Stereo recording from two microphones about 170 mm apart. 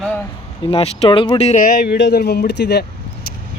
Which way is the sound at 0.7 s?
35° left (ahead or behind).